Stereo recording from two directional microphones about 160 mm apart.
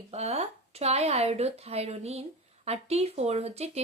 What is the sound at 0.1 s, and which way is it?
Speech, 40° right (ahead or behind).